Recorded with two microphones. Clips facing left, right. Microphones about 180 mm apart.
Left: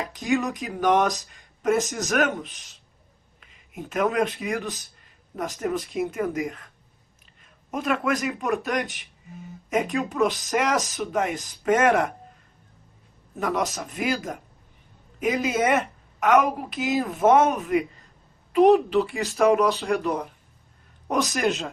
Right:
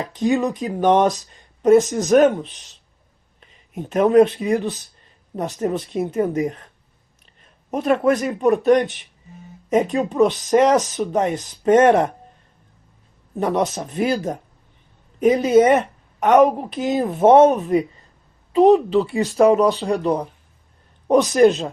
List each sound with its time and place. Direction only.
0.3 s speech: 30° right (ahead or behind)
3.8 s speech: 35° right (ahead or behind)
7.7 s speech: 35° right (ahead or behind)
9.9 s speech: 30° right (ahead or behind)
13.3 s speech: 35° right (ahead or behind)